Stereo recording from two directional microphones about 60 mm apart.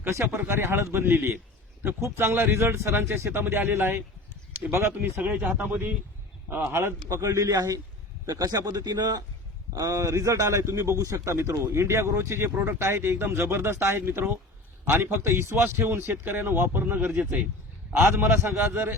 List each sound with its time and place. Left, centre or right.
0.0 s a man's voice: right
5.5 s a man's voice: right
6.7 s a man's voice: right
9.7 s a man's voice: right
16.8 s speech: right
18.0 s a man's voice: right